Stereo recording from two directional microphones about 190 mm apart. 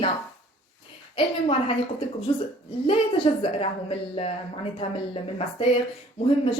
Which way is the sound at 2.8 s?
30° left (ahead or behind).